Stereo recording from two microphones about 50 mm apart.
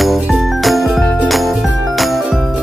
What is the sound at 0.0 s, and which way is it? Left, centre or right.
Music, centre.